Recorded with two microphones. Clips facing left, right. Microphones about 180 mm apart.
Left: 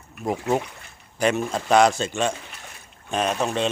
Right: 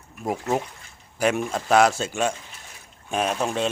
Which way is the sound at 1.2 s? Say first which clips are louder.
Left 1 dB; 5° right (ahead or behind).